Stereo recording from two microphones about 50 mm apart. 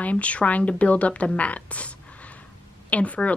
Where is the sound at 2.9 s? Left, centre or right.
Left.